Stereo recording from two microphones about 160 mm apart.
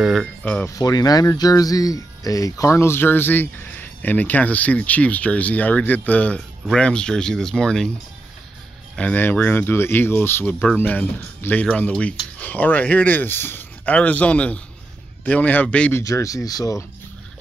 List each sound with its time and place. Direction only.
0.0 s speech: centre (ahead or behind)
0.7 s speech: 20° left (ahead or behind); by 7.9 s 5° left (ahead or behind)
8.9 s speech: 10° left (ahead or behind)
16.0 s speech: 20° left (ahead or behind)